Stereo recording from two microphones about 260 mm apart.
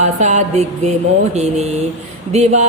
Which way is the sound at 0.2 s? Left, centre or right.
Right.